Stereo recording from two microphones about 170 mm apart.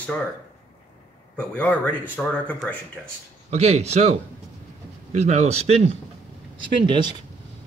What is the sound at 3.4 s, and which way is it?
Speech, 40° right (ahead or behind).